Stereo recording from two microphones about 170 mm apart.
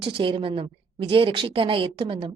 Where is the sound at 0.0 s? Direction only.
30° right (ahead or behind).